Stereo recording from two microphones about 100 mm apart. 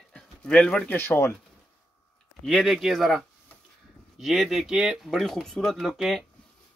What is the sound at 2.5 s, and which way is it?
Speech, centre (ahead or behind).